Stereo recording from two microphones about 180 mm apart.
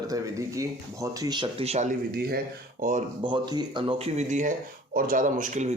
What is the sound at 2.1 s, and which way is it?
Speech, 60° right (ahead or behind).